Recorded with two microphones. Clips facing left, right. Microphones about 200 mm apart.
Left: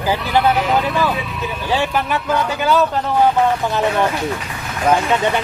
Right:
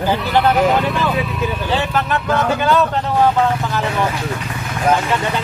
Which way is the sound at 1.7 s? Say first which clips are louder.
Left 2 dB; 10° left (ahead or behind).